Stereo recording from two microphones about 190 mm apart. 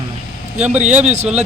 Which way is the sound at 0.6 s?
35° right (ahead or behind).